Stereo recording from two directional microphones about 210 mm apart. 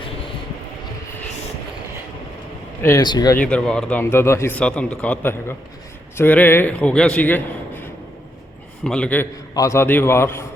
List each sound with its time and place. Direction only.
2.8 s speech: 15° left (ahead or behind)
3.3 s speech: 5° left (ahead or behind)